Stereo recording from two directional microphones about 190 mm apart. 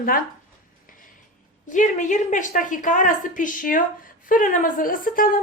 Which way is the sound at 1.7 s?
40° left (ahead or behind).